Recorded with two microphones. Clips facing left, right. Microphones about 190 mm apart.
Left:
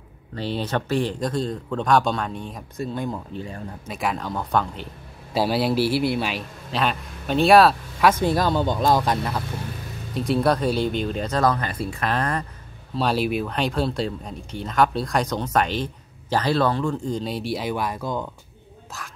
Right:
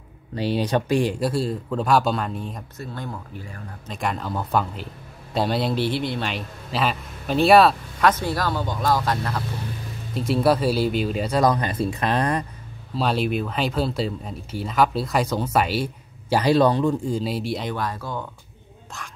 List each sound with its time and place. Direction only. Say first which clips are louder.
0.3 s speech: right 3 dB; 10° right (ahead or behind)
2.8 s a man's voice: left 7 dB; 15° left (ahead or behind)
3.8 s a man's voice: even; 5° left (ahead or behind)
10.1 s speech: right 1 dB; centre (ahead or behind)
12.9 s speech: even; centre (ahead or behind)
18.9 s speech: even; centre (ahead or behind)